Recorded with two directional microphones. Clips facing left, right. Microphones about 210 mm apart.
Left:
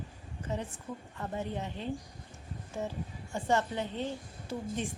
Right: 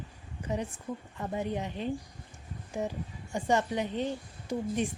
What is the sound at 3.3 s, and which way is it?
Speech, 15° right (ahead or behind).